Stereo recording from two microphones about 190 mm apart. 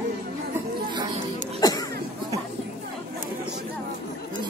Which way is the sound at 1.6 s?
20° left (ahead or behind).